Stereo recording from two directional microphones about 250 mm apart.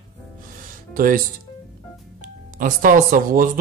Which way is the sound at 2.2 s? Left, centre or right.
Right.